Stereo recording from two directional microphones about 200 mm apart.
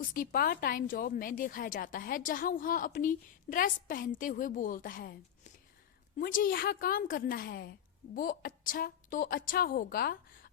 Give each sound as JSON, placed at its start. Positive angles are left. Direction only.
{"t": 0.1, "sound": "a woman's voice", "side_deg": 45}